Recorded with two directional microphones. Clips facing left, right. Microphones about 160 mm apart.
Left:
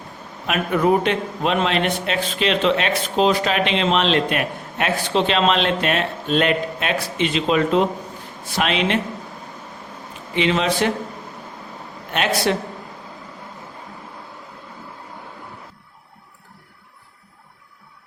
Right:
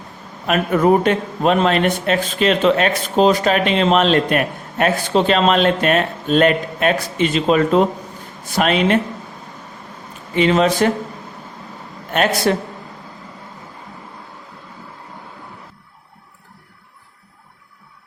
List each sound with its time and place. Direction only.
0.4 s a man's voice: 40° right (ahead or behind)
10.3 s a man's voice: 45° right (ahead or behind)
12.1 s a man's voice: 45° right (ahead or behind)